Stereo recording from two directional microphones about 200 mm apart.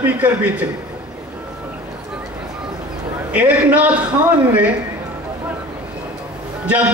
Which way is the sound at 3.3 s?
5° right (ahead or behind).